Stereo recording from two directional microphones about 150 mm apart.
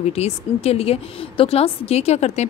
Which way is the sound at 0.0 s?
45° left (ahead or behind).